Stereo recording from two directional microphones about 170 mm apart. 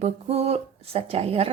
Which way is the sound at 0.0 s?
35° right (ahead or behind).